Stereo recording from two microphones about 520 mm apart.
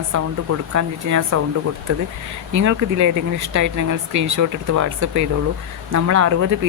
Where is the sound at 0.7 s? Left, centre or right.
Right.